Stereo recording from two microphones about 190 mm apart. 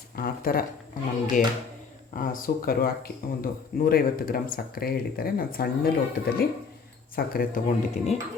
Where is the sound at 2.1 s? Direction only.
45° left (ahead or behind).